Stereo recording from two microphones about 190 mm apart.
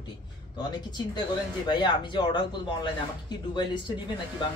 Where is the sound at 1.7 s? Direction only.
25° left (ahead or behind).